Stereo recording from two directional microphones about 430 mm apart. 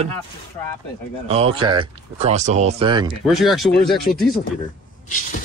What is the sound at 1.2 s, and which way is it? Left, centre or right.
Speech, centre.